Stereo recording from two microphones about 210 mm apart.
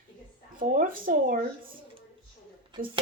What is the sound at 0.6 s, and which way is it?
Speech, 40° right (ahead or behind).